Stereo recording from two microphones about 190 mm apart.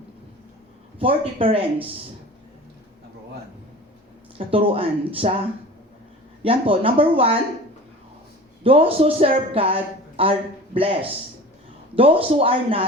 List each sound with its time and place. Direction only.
0.9 s a woman's voice: 30° right (ahead or behind)
4.4 s a woman's voice: 30° right (ahead or behind)
6.4 s a woman's voice: 30° right (ahead or behind)
8.6 s a woman's voice: 30° right (ahead or behind)